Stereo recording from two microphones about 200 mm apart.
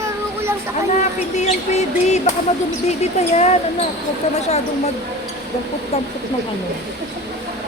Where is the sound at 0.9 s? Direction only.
35° left (ahead or behind).